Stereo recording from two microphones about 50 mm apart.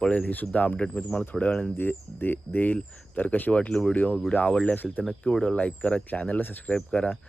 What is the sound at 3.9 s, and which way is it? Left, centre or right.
Speech, left.